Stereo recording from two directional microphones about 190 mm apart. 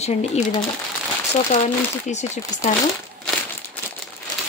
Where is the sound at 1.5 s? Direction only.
35° left (ahead or behind).